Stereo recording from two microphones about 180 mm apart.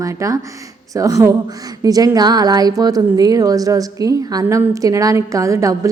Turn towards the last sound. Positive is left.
turn(degrees=-15)  # may be behind; listen again after turning